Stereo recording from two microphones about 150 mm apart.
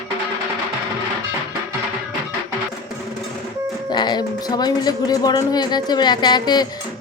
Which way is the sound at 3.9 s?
30° left (ahead or behind).